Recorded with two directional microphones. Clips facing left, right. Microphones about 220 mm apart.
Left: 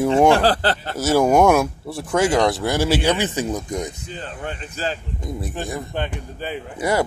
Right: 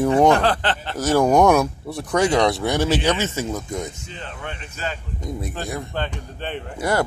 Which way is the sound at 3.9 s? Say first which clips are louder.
Left 3 dB; 35° left (ahead or behind).